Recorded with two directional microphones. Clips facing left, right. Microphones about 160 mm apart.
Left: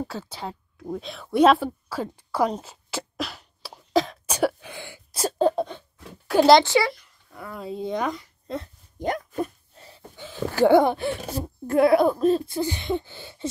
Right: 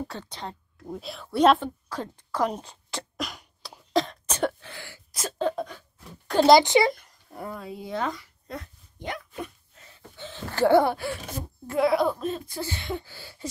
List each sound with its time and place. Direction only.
0.1 s speech: 5° left (ahead or behind)
1.2 s speech: 10° left (ahead or behind)
2.6 s a sound: 5° left (ahead or behind)
3.9 s cough: centre (ahead or behind); by 5.0 s 20° left (ahead or behind)
5.1 s sneeze: 30° left (ahead or behind)
6.2 s a child's voice: 5° left (ahead or behind)
6.6 s a child's voice: 20° right (ahead or behind)
6.9 s a sound: 45° right (ahead or behind)
7.6 s speech: 25° left (ahead or behind)
9.0 s dog: 45° left (ahead or behind)
10.1 s speech: 10° left (ahead or behind)
11.6 s speech: 55° left (ahead or behind); by 12.4 s 35° left (ahead or behind)
12.4 s speech: 20° left (ahead or behind)